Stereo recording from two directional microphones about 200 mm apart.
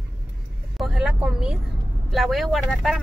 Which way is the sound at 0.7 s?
Centre (ahead or behind).